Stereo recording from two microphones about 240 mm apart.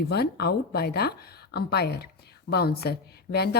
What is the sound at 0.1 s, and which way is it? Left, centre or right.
Speech, left.